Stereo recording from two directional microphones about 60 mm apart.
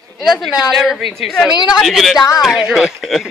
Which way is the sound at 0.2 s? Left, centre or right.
Centre.